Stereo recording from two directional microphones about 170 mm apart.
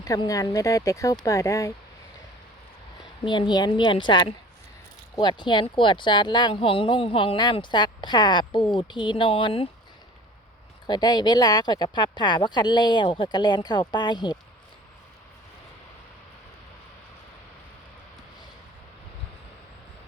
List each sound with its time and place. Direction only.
0.0 s speech: 20° left (ahead or behind)
3.2 s speech: 25° left (ahead or behind)
10.8 s speech: 25° left (ahead or behind)